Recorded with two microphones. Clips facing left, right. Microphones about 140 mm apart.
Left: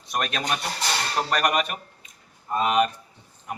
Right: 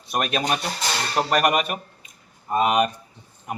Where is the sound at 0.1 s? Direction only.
10° right (ahead or behind).